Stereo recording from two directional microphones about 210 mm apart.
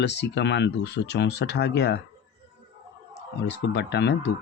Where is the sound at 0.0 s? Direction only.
55° left (ahead or behind).